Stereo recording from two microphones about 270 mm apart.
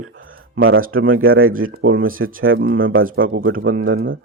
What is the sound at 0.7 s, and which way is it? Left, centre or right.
Speech, right.